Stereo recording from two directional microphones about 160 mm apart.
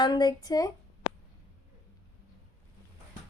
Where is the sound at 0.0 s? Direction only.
25° left (ahead or behind).